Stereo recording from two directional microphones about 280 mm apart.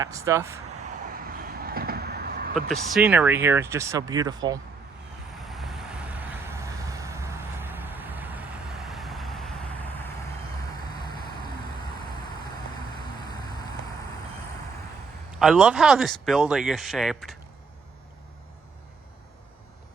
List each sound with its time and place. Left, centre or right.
0.0 s speech: centre
1.1 s a sound: right
2.6 s speech: centre
5.5 s vehicle: centre
15.3 s speech: centre